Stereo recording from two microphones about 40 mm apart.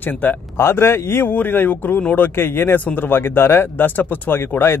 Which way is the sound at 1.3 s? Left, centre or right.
Left.